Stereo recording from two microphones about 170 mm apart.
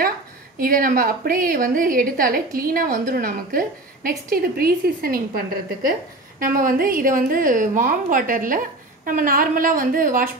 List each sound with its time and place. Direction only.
0.6 s a woman's voice: 55° right (ahead or behind)